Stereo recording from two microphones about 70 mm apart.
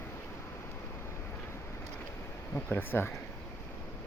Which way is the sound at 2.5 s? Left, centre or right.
Left.